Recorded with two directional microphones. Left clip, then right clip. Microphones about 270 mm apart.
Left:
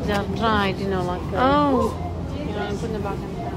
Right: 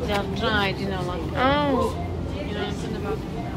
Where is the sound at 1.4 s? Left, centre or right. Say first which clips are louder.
Left 3 dB; centre.